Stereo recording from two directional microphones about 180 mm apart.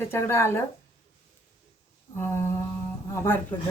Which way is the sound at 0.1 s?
15° left (ahead or behind).